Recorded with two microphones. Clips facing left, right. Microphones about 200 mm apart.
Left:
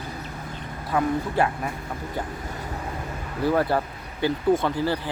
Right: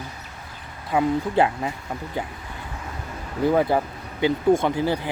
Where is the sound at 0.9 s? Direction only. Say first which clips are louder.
Right 3 dB; 20° right (ahead or behind).